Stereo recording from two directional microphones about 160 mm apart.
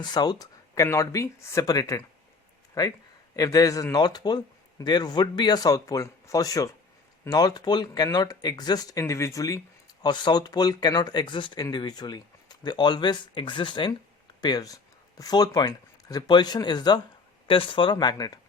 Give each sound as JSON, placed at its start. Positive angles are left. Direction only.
{"t": 0.0, "sound": "speech", "side_deg": 25}